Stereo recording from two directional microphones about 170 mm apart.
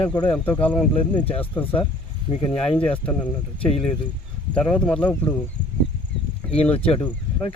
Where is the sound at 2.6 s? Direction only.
5° left (ahead or behind).